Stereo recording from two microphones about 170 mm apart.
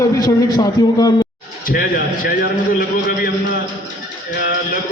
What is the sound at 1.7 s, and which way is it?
Speech, 55° left (ahead or behind).